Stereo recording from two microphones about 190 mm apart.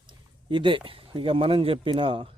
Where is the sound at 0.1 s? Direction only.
25° right (ahead or behind).